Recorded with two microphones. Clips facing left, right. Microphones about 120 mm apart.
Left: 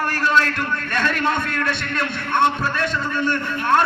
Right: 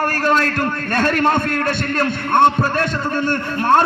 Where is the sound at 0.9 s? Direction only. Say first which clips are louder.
Right 5 dB; 45° right (ahead or behind).